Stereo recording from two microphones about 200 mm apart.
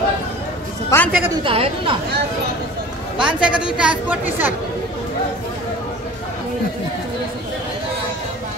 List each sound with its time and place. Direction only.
0.8 s a man's voice: 10° left (ahead or behind)
1.3 s a woman's voice: 25° right (ahead or behind)
3.2 s a woman's voice: 5° right (ahead or behind)